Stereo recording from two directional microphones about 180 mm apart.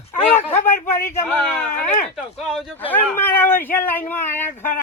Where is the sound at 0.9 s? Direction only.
15° left (ahead or behind).